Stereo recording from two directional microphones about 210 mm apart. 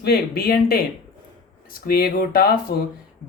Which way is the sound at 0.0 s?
50° left (ahead or behind).